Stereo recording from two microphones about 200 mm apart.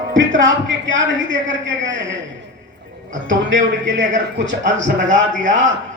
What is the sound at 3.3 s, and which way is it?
Speech, 65° right (ahead or behind).